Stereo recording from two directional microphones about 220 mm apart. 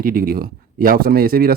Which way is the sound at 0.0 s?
40° right (ahead or behind).